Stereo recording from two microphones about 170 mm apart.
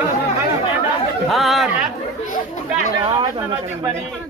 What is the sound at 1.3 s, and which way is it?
Speech, centre (ahead or behind).